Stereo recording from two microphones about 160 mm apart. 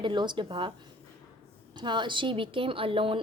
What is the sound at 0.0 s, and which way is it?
Speech, 30° right (ahead or behind).